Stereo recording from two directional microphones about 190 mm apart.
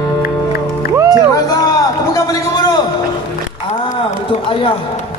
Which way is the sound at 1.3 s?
20° left (ahead or behind).